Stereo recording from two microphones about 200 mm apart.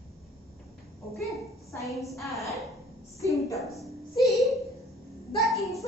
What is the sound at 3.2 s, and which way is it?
Speech, 15° left (ahead or behind).